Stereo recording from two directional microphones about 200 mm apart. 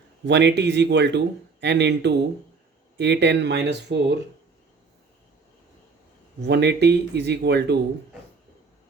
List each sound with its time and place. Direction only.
0.3 s speech: 60° right (ahead or behind)
6.4 s speech: 55° right (ahead or behind)